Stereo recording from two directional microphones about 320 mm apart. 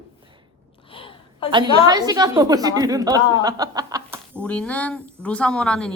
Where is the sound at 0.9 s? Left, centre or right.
Centre.